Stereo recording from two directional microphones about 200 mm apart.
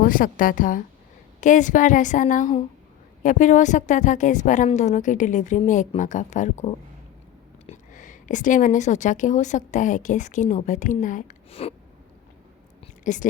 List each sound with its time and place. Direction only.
0.0 s a woman's voice: 45° left (ahead or behind)
13.1 s a woman's voice: 40° left (ahead or behind)